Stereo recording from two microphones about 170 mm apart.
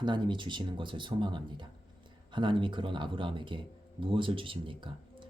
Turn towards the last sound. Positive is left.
turn(degrees=-30)  # may be behind; listen again after turning